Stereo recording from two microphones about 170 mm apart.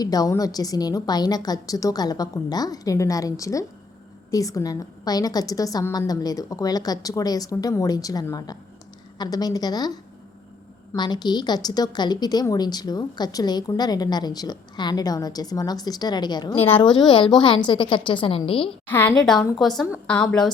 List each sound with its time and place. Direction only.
0.0 s a woman's voice: 20° left (ahead or behind)
16.6 s a woman's voice: 10° left (ahead or behind)
16.9 s a woman's voice: 30° left (ahead or behind)
18.9 s a woman's voice: 10° left (ahead or behind)